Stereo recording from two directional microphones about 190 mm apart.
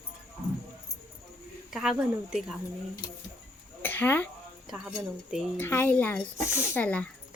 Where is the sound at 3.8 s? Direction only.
10° left (ahead or behind).